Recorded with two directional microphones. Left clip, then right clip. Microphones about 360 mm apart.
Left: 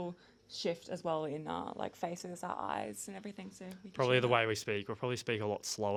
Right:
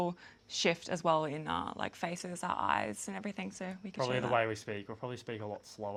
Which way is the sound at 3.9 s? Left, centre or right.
Left.